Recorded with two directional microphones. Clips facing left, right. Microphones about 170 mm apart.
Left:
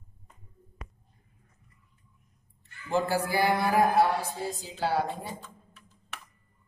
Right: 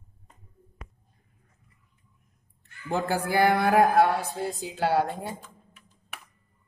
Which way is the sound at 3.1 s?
60° right (ahead or behind).